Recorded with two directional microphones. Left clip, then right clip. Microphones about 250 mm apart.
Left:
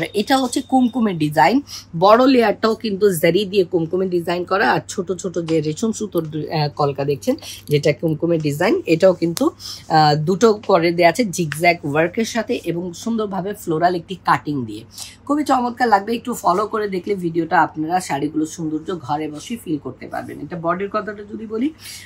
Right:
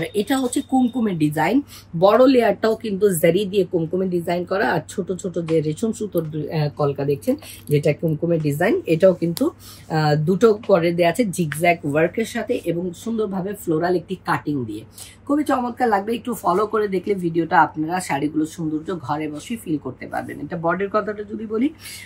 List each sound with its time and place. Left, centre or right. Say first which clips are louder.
0.3 s speech: left 7 dB; left
16.3 s speech: left 1 dB; centre